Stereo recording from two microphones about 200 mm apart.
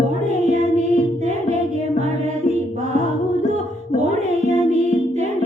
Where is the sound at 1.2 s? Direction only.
35° right (ahead or behind).